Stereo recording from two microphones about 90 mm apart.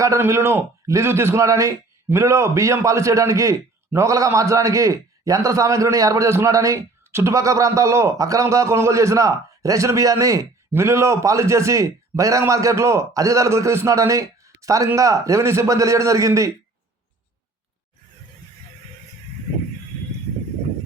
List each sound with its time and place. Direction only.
0.0 s a man's voice: 35° right (ahead or behind)